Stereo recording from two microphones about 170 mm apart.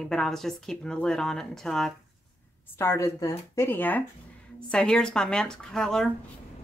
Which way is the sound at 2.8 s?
15° left (ahead or behind).